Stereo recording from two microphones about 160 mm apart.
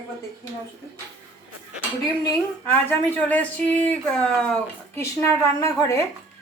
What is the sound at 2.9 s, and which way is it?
Speech, 10° left (ahead or behind).